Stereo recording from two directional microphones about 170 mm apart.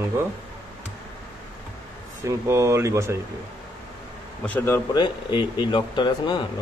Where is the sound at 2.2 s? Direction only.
15° right (ahead or behind).